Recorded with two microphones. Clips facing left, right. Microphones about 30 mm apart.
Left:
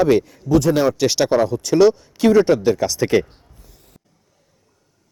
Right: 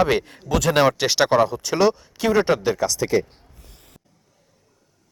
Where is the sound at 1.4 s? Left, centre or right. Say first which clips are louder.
Left 5 dB; centre.